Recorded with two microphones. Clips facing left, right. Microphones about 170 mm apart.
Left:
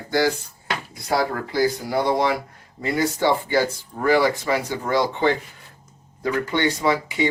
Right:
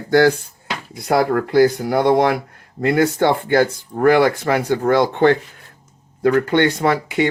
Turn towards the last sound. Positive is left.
turn(degrees=-60)  # may be behind; listen again after turning